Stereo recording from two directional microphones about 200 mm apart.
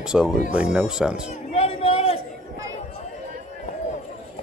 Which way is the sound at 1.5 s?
30° left (ahead or behind).